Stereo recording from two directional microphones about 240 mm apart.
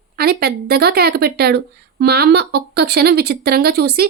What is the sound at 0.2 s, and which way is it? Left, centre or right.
Speech, right.